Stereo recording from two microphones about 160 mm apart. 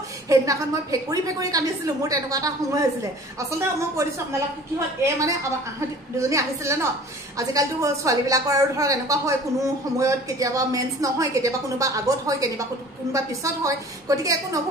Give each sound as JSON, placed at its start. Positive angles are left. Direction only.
{"t": 0.3, "sound": "a woman's voice", "side_deg": -20}